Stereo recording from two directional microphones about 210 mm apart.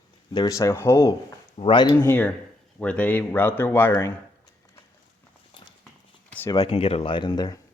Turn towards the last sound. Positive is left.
turn(degrees=20)  # may be behind; listen again after turning